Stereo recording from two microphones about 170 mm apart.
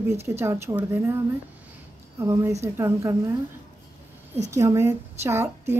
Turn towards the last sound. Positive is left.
turn(degrees=-15)  # may be behind; listen again after turning